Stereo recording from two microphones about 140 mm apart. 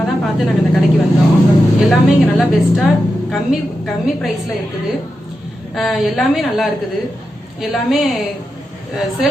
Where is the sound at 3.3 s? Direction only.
Centre (ahead or behind).